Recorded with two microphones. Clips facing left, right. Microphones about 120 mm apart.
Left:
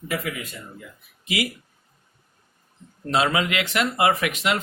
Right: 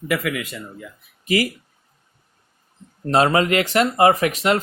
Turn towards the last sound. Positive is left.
turn(degrees=-40)  # may be behind; listen again after turning